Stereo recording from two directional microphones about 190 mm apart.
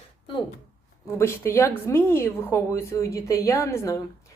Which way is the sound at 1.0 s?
15° left (ahead or behind).